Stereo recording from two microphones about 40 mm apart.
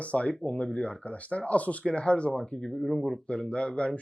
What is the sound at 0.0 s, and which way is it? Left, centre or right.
Speech, left.